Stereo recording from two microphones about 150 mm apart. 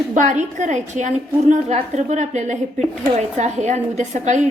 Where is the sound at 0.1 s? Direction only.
55° right (ahead or behind).